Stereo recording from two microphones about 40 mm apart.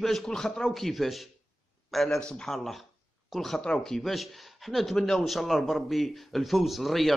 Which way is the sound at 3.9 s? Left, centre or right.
Centre.